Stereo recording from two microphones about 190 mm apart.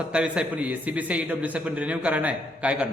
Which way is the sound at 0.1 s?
5° right (ahead or behind).